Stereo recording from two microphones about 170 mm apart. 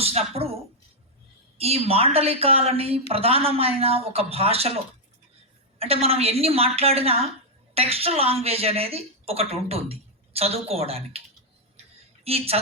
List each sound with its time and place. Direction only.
0.0 s a woman's voice: 35° right (ahead or behind)
5.8 s a woman's voice: 35° right (ahead or behind)
11.8 s a sound: 35° right (ahead or behind)